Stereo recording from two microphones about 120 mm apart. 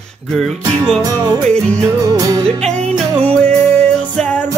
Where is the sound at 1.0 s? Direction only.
30° right (ahead or behind).